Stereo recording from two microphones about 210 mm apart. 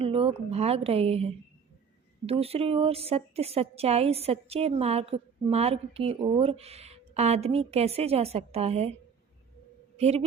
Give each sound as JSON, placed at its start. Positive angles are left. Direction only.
{"t": 0.0, "sound": "a woman's voice", "side_deg": -25}
{"t": 10.0, "sound": "a woman's voice", "side_deg": -30}